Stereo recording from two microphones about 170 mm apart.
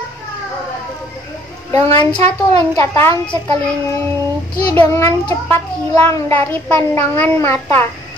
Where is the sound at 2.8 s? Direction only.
15° left (ahead or behind).